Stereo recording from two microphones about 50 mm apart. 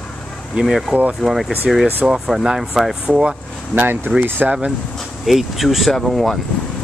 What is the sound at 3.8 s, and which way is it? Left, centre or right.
Speech, right.